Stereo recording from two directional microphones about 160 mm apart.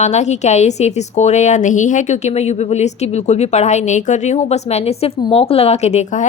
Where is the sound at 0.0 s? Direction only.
45° left (ahead or behind).